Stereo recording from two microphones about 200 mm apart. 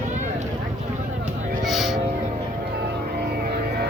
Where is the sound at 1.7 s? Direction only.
Centre (ahead or behind).